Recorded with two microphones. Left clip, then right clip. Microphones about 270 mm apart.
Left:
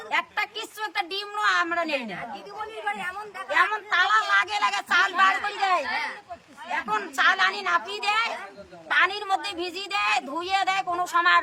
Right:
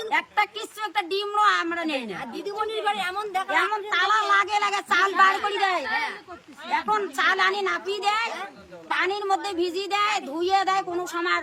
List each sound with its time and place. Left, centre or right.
0.1 s speech: centre
2.8 s speech: right
3.5 s speech: centre